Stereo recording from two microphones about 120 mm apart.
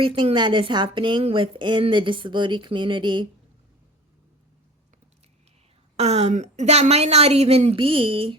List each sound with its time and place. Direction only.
0.0 s a woman's voice: 50° right (ahead or behind)
6.0 s a woman's voice: 65° right (ahead or behind); by 8.4 s 45° right (ahead or behind)